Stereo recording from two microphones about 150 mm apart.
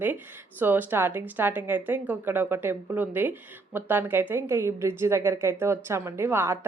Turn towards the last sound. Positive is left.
turn(degrees=-15)  # may be behind; listen again after turning